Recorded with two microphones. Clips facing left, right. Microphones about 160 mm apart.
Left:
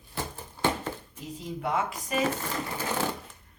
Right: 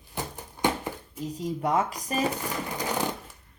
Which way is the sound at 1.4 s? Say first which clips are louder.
Right 4 dB; 40° right (ahead or behind).